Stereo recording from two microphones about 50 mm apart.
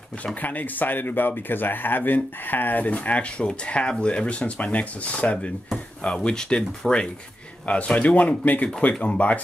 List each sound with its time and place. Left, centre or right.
0.2 s speech: left
6.0 s speech: centre